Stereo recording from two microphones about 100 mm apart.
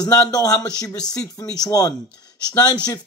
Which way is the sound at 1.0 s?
10° left (ahead or behind).